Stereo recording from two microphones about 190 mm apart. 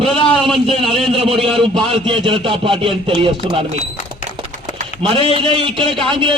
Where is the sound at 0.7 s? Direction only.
30° right (ahead or behind).